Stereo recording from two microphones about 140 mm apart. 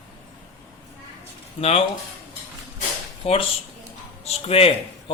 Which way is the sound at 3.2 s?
40° left (ahead or behind).